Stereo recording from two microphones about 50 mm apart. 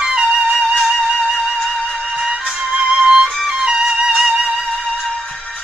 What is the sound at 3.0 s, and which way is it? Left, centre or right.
Music, centre.